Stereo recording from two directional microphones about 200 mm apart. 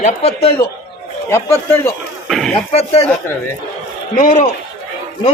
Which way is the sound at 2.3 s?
Centre (ahead or behind).